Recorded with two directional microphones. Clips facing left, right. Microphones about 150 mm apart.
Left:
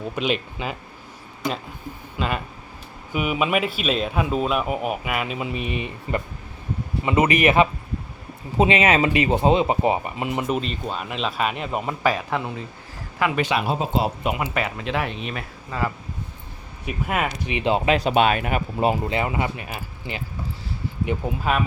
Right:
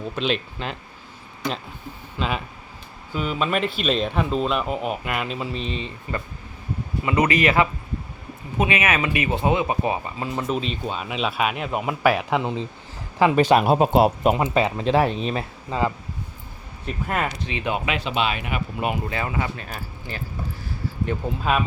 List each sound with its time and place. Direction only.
0.2 s speech: 5° left (ahead or behind)
2.1 s speech: centre (ahead or behind)
3.1 s speech: 10° left (ahead or behind)
10.5 s speech: centre (ahead or behind); by 14.1 s 60° right (ahead or behind)
14.3 s speech: 30° right (ahead or behind)
16.8 s speech: 5° left (ahead or behind)
17.5 s speech: 25° left (ahead or behind); by 18.9 s 45° left (ahead or behind)
18.9 s speech: 20° left (ahead or behind)
21.2 s speech: 15° left (ahead or behind)